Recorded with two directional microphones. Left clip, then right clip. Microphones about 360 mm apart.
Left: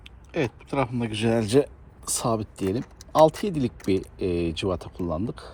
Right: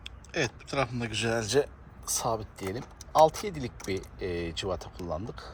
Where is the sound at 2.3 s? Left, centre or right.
Left.